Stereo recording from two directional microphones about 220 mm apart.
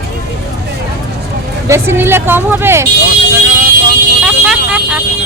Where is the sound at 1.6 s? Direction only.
10° right (ahead or behind).